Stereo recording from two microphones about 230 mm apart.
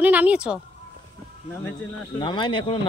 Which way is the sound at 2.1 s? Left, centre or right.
Left.